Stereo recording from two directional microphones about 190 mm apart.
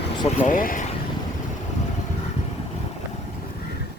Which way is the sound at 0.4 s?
45° left (ahead or behind).